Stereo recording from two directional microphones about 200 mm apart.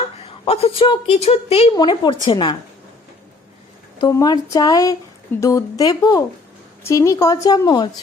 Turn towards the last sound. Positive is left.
turn(degrees=20)  # may be behind; listen again after turning